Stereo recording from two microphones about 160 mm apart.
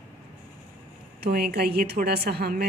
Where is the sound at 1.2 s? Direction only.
75° right (ahead or behind).